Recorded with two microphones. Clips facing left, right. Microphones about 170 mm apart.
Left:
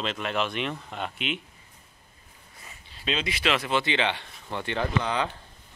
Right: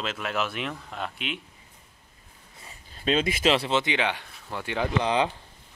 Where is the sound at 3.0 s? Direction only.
50° right (ahead or behind).